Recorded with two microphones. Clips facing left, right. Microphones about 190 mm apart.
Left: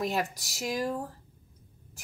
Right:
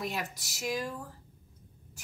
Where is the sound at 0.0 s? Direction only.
40° left (ahead or behind).